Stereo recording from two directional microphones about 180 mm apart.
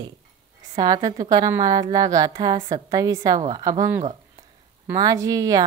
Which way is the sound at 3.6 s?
20° right (ahead or behind).